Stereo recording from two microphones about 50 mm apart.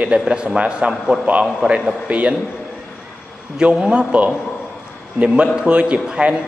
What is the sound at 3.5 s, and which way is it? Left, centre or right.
Speech, centre.